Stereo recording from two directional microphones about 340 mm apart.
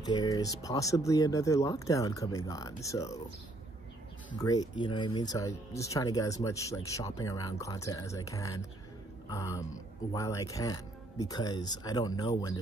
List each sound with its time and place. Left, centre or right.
0.0 s speech: centre
4.4 s speech: centre